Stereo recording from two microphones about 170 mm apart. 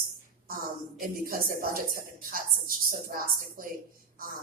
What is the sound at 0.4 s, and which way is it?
A woman's voice, 55° right (ahead or behind).